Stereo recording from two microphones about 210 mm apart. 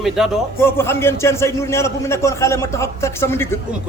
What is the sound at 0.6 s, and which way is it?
A man's voice, 10° left (ahead or behind).